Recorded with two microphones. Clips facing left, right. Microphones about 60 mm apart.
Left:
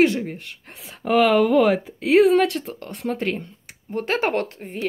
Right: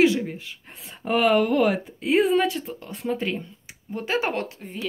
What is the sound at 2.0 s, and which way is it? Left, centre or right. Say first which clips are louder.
Speech: left 5 dB; left.